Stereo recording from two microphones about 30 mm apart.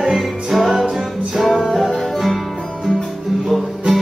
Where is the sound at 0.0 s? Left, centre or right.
Centre.